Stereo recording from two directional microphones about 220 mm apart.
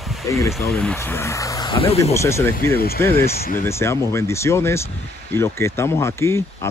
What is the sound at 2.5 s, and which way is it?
Speech, 45° left (ahead or behind).